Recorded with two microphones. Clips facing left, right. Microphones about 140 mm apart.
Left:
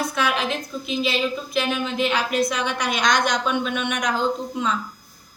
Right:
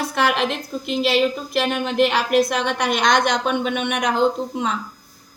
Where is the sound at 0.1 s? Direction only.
70° right (ahead or behind).